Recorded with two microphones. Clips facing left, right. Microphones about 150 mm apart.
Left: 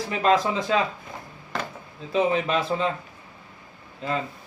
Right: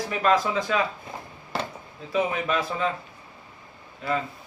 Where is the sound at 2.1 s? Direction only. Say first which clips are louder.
Left 3 dB; 30° left (ahead or behind).